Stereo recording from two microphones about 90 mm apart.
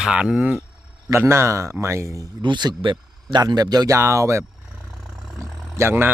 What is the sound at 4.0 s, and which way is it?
Speech, 35° right (ahead or behind).